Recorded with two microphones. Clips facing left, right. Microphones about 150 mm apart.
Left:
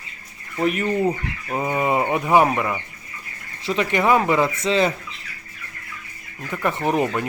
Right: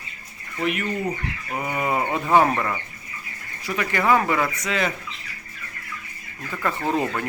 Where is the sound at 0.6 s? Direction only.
35° left (ahead or behind).